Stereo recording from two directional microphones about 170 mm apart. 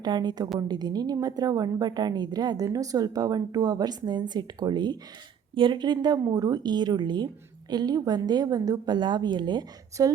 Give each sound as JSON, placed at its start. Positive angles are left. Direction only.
{"t": 0.0, "sound": "a woman's voice", "side_deg": -25}